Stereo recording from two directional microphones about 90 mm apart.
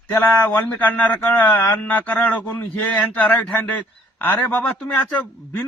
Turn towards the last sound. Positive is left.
turn(degrees=15)  # may be behind; listen again after turning